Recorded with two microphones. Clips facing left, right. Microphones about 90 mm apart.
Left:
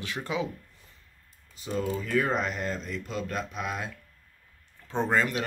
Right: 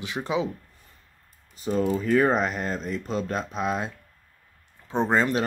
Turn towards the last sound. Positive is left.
turn(degrees=-35)  # may be behind; listen again after turning